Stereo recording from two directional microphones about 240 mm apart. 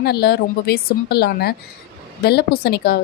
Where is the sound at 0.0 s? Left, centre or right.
Left.